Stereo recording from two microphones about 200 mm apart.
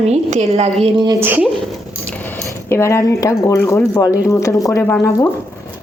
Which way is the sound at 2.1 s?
10° left (ahead or behind).